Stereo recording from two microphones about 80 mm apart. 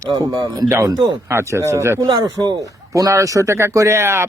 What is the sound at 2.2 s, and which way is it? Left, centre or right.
Speech, right.